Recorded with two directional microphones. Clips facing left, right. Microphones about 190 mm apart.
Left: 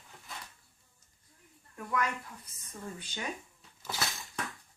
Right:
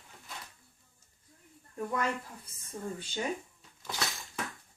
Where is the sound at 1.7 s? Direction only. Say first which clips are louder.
Right 1 dB; 30° right (ahead or behind).